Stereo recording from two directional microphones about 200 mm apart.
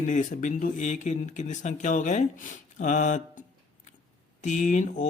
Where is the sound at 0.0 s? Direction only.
40° left (ahead or behind).